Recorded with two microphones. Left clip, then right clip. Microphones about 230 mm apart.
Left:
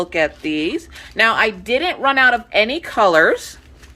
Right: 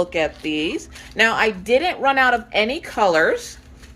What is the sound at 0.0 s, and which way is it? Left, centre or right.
A woman's voice, centre.